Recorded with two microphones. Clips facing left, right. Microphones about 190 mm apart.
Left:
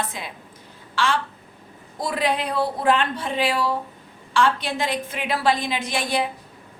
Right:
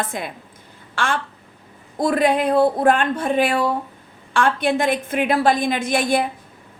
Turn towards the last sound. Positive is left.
turn(degrees=-50)  # may be behind; listen again after turning